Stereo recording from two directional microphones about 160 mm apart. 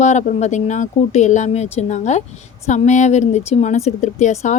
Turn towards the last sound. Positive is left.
turn(degrees=50)  # may be behind; listen again after turning